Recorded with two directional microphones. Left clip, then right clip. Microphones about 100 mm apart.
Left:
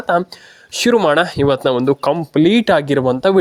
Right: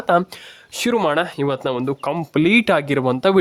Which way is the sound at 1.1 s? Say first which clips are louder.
Left 6 dB; 45° left (ahead or behind).